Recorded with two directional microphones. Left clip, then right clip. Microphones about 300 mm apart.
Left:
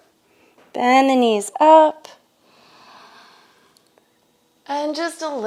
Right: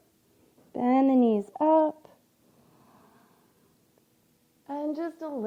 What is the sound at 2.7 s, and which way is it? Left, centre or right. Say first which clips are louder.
Sniff: left 15 dB; centre.